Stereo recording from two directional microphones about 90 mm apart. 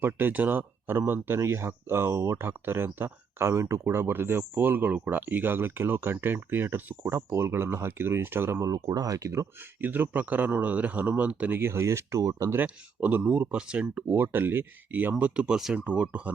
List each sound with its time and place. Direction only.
0.0 s speech: 20° right (ahead or behind)
8.6 s speech: 40° right (ahead or behind)
9.8 s speech: 20° right (ahead or behind); by 12.5 s 35° right (ahead or behind)
12.5 s speech: 20° right (ahead or behind)
13.6 s speech: 10° right (ahead or behind)
13.8 s speech: 20° right (ahead or behind)
15.2 s speech: 10° right (ahead or behind)